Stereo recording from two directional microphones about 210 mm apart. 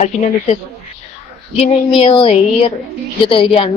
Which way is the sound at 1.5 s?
25° left (ahead or behind).